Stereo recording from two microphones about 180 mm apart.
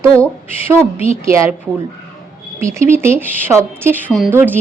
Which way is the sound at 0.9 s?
35° left (ahead or behind).